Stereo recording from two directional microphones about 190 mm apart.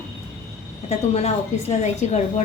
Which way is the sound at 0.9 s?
35° left (ahead or behind).